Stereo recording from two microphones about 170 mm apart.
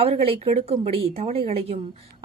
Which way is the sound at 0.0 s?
35° right (ahead or behind).